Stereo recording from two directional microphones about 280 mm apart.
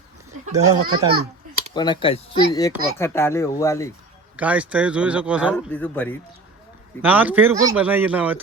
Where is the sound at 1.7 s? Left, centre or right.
Centre.